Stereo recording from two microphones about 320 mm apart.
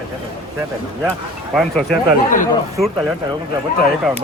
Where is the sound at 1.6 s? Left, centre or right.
Centre.